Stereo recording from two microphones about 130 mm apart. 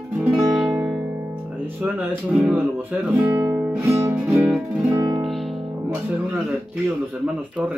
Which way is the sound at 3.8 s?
20° right (ahead or behind).